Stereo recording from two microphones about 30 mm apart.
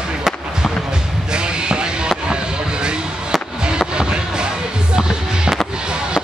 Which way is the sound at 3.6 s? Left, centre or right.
Right.